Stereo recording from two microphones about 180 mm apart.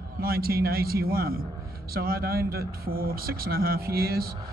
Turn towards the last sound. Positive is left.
turn(degrees=-55)  # may be behind; listen again after turning